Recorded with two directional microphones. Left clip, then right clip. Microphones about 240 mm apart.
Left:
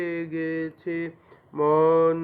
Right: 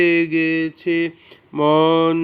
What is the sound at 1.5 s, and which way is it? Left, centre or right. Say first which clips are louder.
Speech: right 5 dB; right.